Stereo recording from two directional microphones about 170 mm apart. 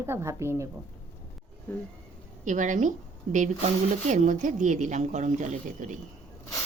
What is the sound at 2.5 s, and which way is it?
A woman's voice, 45° right (ahead or behind).